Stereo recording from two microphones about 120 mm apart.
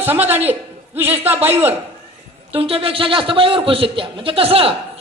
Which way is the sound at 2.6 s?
50° right (ahead or behind).